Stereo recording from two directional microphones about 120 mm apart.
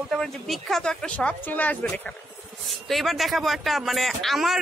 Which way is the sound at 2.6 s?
Centre (ahead or behind).